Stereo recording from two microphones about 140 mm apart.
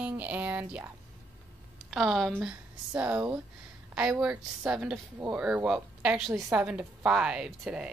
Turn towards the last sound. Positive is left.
turn(degrees=-5)  # may be behind; listen again after turning